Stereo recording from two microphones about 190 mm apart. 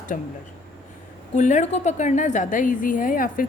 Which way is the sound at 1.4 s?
40° left (ahead or behind).